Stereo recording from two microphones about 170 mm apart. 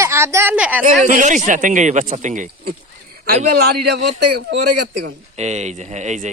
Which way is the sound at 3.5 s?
70° right (ahead or behind).